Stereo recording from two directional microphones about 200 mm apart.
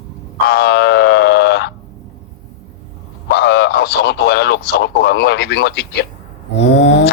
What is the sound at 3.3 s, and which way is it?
Radio, 55° left (ahead or behind).